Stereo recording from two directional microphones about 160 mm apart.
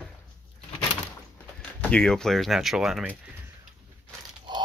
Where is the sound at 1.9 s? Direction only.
5° left (ahead or behind).